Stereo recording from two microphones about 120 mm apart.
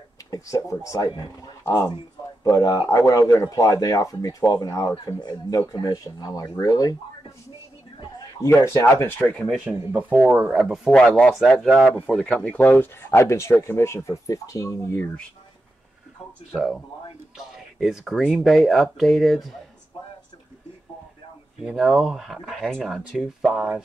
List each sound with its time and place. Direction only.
0.3 s speech: 30° left (ahead or behind)
8.4 s speech: 25° left (ahead or behind)
9.7 s speech: 15° right (ahead or behind); by 15.0 s 25° left (ahead or behind)
16.5 s speech: centre (ahead or behind)
21.6 s speech: 5° right (ahead or behind)